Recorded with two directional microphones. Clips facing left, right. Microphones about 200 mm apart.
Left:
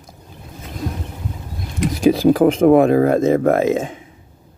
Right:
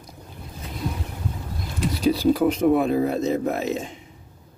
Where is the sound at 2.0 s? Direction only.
90° left.